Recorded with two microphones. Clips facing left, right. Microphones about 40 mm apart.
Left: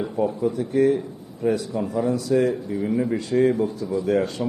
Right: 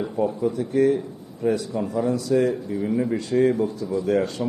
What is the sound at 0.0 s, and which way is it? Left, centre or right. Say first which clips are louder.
A man's voice: even; centre.